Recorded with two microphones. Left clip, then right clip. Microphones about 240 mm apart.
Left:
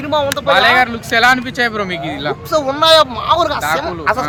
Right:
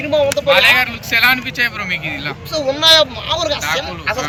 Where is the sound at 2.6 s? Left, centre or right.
Centre.